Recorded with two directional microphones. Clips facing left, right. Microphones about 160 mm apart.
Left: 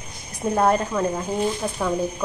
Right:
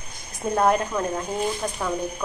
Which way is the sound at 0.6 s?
Centre (ahead or behind).